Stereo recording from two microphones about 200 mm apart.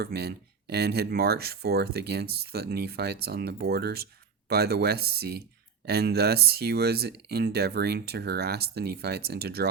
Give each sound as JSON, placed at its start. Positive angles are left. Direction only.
{"t": 0.0, "sound": "speech", "side_deg": -55}